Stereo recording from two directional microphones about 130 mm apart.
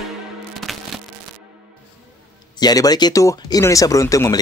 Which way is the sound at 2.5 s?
30° left (ahead or behind).